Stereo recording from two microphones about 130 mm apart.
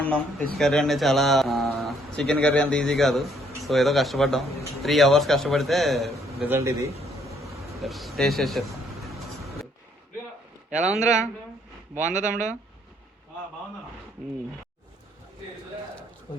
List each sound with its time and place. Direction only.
0.0 s speech: 5° left (ahead or behind)
6.4 s a man's voice: 20° right (ahead or behind)
7.8 s a sound: centre (ahead or behind)
10.7 s speech: 65° right (ahead or behind)
12.2 s speech: 75° right (ahead or behind)